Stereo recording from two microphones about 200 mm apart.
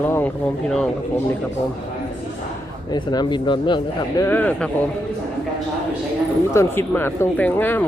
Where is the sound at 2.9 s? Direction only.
20° left (ahead or behind).